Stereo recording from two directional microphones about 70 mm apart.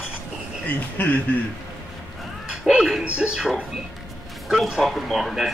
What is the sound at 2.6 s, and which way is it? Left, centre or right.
Music, centre.